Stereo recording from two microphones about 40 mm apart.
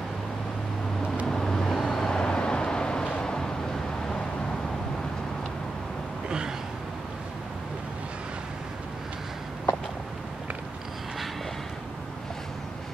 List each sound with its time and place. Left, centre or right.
1.3 s vehicle: centre